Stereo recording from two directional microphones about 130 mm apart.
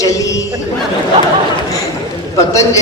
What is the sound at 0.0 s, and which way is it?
Chatter, 25° left (ahead or behind).